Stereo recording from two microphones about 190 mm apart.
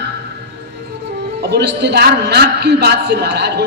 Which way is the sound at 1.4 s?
60° right (ahead or behind).